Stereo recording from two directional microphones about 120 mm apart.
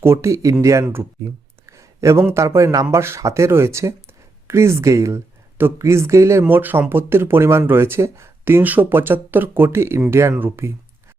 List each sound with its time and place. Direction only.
0.0 s speech: 20° right (ahead or behind)
0.6 s a sound: 25° right (ahead or behind)
2.3 s speech: 25° right (ahead or behind)